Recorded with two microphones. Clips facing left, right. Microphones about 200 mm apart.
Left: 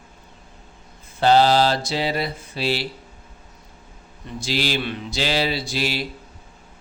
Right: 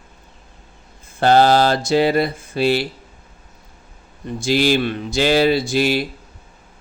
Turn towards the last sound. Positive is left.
turn(degrees=-50)  # may be behind; listen again after turning